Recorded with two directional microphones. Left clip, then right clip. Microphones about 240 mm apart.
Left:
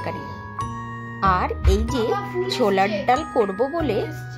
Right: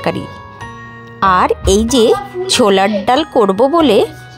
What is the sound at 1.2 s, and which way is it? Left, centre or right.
Speech, right.